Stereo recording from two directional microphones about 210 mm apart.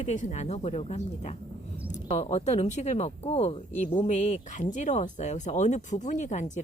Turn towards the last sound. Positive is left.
turn(degrees=35)  # may be behind; listen again after turning